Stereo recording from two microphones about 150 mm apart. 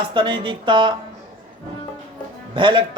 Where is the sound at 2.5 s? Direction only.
35° right (ahead or behind).